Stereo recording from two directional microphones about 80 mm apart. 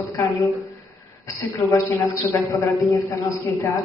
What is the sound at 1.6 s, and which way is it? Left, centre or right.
A man's voice, left.